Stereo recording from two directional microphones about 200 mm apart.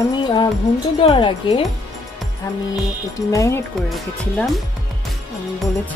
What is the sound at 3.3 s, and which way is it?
Speech, 15° left (ahead or behind).